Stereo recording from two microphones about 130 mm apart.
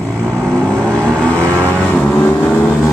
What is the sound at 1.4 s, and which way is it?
Vehicle, 20° right (ahead or behind).